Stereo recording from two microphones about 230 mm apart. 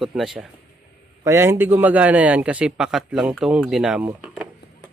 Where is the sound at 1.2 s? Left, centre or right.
Centre.